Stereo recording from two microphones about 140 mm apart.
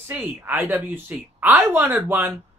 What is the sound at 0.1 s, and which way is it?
Speech, 10° right (ahead or behind).